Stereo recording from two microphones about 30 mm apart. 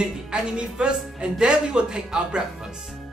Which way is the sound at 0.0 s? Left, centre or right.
Right.